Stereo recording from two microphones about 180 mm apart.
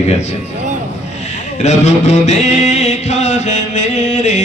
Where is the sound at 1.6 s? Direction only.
40° left (ahead or behind).